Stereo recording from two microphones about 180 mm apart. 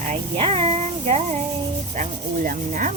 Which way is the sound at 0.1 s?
35° right (ahead or behind).